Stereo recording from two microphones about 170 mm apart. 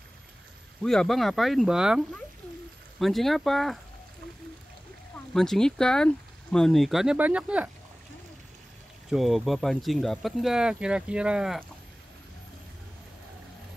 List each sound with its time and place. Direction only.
0.8 s speech: centre (ahead or behind)
5.3 s speech: 5° left (ahead or behind)
9.1 s speech: centre (ahead or behind)